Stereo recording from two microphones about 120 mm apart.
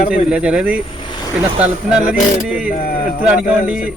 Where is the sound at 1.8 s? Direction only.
10° right (ahead or behind).